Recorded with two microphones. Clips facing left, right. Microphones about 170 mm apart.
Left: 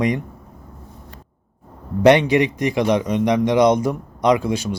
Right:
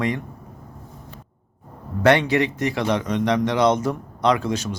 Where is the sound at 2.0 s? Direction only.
15° left (ahead or behind).